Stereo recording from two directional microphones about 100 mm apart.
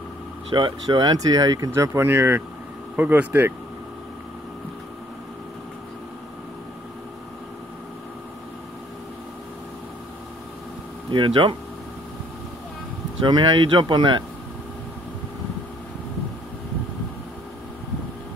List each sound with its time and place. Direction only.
0.6 s speech: 50° right (ahead or behind)
1.7 s speech: 25° right (ahead or behind)
11.1 s speech: 55° right (ahead or behind)
13.2 s speech: 50° right (ahead or behind)